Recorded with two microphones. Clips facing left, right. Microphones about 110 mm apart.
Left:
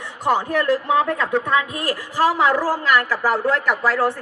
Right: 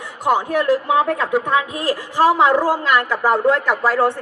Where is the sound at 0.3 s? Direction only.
15° right (ahead or behind).